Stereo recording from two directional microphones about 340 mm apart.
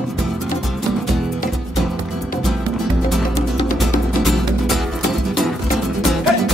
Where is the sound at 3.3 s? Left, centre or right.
Centre.